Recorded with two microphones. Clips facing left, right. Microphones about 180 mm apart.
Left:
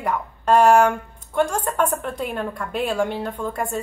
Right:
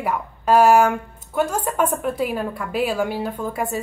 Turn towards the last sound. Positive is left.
turn(degrees=-5)  # may be behind; listen again after turning